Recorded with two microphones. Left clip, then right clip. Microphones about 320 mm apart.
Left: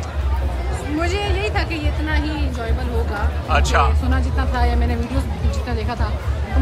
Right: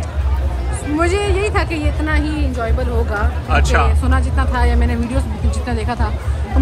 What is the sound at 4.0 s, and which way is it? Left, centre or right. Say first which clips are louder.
Speech: right 4 dB; right.